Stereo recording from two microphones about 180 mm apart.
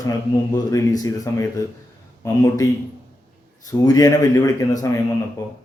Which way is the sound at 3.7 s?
20° left (ahead or behind).